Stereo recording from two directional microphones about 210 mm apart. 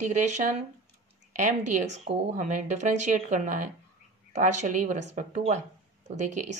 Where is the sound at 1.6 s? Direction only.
35° right (ahead or behind).